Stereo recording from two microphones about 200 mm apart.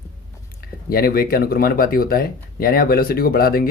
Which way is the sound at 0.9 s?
50° left (ahead or behind).